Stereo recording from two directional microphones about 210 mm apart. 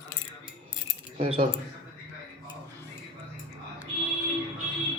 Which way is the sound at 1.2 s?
25° right (ahead or behind).